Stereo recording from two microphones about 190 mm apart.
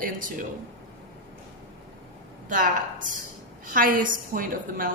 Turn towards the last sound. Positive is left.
turn(degrees=-45)  # may be behind; listen again after turning